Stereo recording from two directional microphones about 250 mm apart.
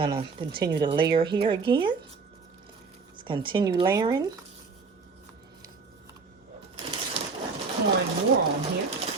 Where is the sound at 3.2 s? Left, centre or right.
Centre.